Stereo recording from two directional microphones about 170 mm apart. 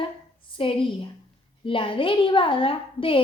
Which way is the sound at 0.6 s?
30° left (ahead or behind).